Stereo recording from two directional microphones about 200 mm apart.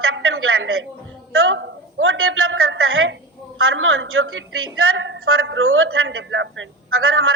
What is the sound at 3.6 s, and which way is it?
A woman's voice, 85° right.